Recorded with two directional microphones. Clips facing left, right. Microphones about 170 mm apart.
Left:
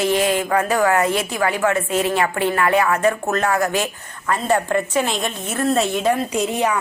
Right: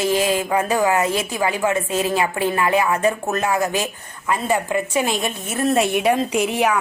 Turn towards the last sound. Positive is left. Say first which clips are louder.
# right 1 dB
turn(degrees=-15)  # may be behind; listen again after turning